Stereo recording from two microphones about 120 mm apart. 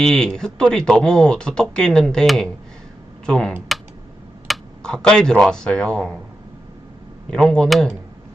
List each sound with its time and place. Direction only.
0.0 s speech: 5° left (ahead or behind)
3.7 s computer keyboard: centre (ahead or behind)
4.4 s speech: 5° left (ahead or behind)
7.3 s speech: 5° left (ahead or behind)